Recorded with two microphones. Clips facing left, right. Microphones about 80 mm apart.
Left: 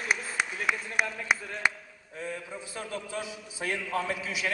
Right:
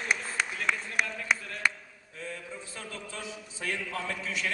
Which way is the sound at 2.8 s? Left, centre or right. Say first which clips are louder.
Left 7 dB; centre.